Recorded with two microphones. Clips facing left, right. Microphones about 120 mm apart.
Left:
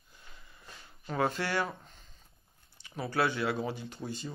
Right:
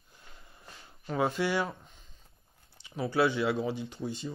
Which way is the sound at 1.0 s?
5° right (ahead or behind).